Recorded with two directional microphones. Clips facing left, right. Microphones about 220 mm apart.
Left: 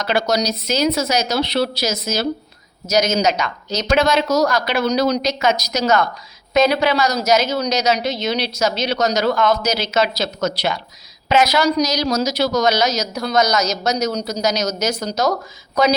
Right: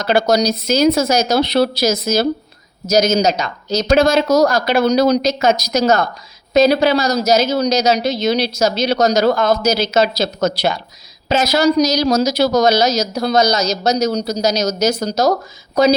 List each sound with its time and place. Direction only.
0.0 s a woman's voice: 50° right (ahead or behind)
11.9 s a woman's voice: 45° right (ahead or behind)